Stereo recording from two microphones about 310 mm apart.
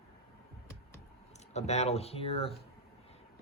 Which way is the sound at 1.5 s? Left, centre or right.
Left.